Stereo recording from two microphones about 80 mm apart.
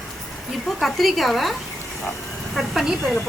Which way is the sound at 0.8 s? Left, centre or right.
Centre.